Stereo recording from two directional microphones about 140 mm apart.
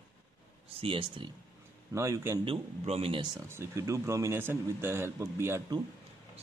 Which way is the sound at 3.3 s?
20° right (ahead or behind).